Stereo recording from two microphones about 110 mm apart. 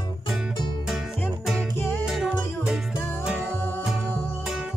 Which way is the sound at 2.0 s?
5° right (ahead or behind).